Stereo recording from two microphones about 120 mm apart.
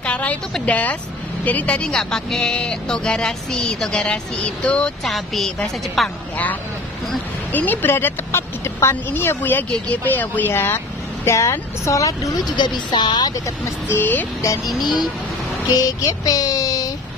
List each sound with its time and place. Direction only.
0.0 s a woman's voice: 10° left (ahead or behind)
7.5 s a woman's voice: 15° left (ahead or behind); by 13.3 s 40° left (ahead or behind)
13.8 s speech: 15° left (ahead or behind)
14.8 s child singing: 35° left (ahead or behind)